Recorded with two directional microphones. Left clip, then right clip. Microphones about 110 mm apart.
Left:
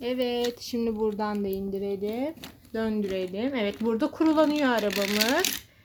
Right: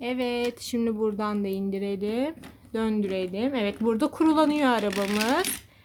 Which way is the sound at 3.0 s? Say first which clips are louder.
Right 1 dB; 10° right (ahead or behind).